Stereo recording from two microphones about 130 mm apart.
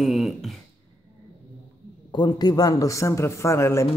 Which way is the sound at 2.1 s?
35° left (ahead or behind).